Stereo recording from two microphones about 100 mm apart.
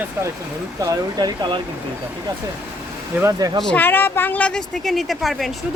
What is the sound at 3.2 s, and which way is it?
Speech, 40° right (ahead or behind).